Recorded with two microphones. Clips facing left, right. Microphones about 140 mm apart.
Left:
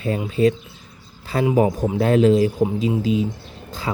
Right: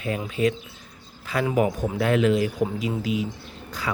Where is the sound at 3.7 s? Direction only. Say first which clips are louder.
Left 3 dB; 25° left (ahead or behind).